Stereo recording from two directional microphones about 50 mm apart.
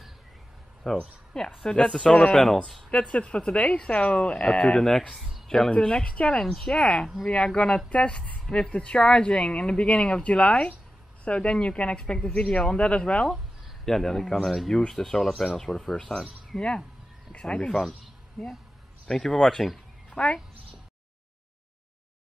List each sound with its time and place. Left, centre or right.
0.8 s speech: centre
2.3 s speech: centre
2.9 s speech: left
6.4 s speech: centre
13.8 s speech: centre
16.5 s speech: centre